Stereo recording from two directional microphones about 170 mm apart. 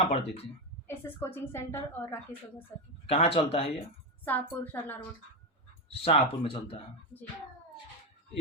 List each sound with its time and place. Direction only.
0.1 s speech: 35° left (ahead or behind)
0.9 s a woman's voice: 15° left (ahead or behind)
3.1 s speech: 35° left (ahead or behind)
4.3 s a woman's voice: 10° left (ahead or behind)
5.9 s speech: 35° left (ahead or behind)